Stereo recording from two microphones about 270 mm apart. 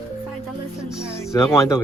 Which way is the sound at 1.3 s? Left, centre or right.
Centre.